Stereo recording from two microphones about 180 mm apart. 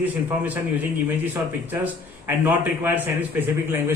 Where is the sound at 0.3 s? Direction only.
10° right (ahead or behind).